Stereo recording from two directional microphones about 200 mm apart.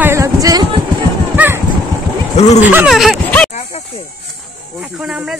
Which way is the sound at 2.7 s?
5° right (ahead or behind).